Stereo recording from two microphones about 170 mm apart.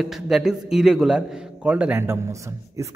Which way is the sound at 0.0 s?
Centre (ahead or behind).